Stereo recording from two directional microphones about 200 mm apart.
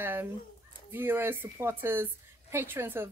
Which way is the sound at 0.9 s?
10° right (ahead or behind).